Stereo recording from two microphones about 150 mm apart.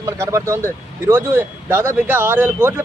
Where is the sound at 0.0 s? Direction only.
20° right (ahead or behind).